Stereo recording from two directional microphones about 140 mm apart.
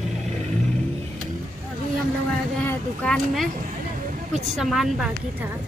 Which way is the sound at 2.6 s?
5° left (ahead or behind).